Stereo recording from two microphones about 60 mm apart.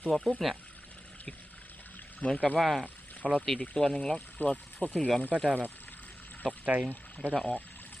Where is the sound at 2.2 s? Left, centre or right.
Left.